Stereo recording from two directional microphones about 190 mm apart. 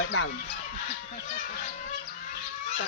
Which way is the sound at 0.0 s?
70° left (ahead or behind).